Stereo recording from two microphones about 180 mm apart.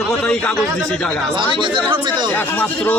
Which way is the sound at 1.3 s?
25° right (ahead or behind).